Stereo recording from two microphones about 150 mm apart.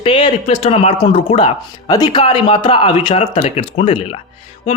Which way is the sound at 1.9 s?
25° left (ahead or behind).